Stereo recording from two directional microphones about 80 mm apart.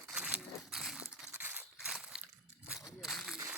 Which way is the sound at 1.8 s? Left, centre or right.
Centre.